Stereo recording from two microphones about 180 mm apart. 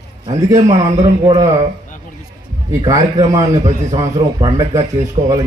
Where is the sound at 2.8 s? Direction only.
20° right (ahead or behind).